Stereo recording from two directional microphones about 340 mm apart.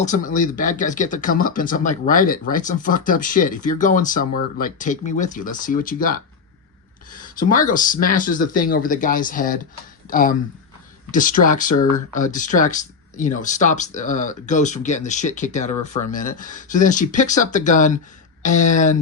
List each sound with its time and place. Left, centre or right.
0.0 s speech: left
7.3 s speech: left